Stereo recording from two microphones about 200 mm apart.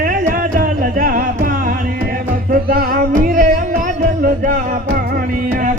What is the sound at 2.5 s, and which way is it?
Music, 45° right (ahead or behind).